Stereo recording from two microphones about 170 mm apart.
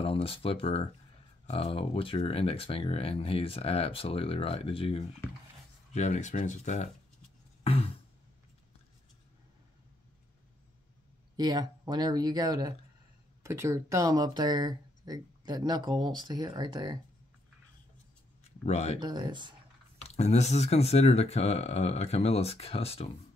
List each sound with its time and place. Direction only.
0.0 s speech: 35° left (ahead or behind)
7.6 s a sound: 35° left (ahead or behind)
11.3 s speech: 25° right (ahead or behind)
18.6 s speech: 40° left (ahead or behind)
18.9 s speech: 25° right (ahead or behind)
20.0 s speech: 40° left (ahead or behind)